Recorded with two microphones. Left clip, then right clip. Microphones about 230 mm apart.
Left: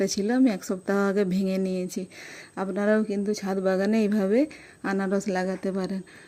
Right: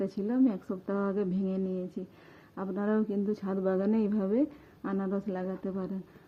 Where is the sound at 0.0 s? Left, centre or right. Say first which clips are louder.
Left 6 dB; left.